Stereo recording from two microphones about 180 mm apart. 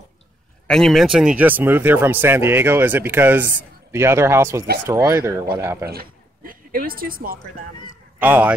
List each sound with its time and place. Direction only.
0.7 s speech: centre (ahead or behind); by 5.9 s 15° right (ahead or behind)
5.9 s speech: 55° right (ahead or behind)
8.2 s speech: 10° right (ahead or behind)